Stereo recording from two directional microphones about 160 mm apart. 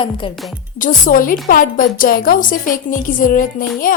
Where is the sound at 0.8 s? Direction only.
60° left (ahead or behind).